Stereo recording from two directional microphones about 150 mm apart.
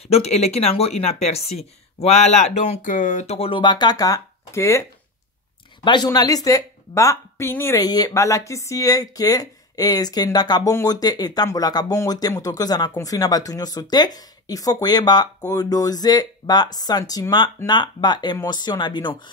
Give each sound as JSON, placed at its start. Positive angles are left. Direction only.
{"t": 0.1, "sound": "speech", "side_deg": 45}
{"t": 5.9, "sound": "a woman's voice", "side_deg": 30}